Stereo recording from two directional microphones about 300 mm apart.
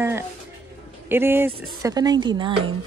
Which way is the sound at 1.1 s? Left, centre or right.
Centre.